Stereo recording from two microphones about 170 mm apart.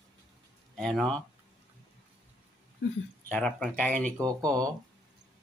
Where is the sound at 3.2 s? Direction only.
10° left (ahead or behind).